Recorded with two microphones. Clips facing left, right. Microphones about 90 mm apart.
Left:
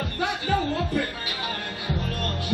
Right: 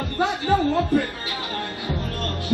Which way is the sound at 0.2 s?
25° right (ahead or behind).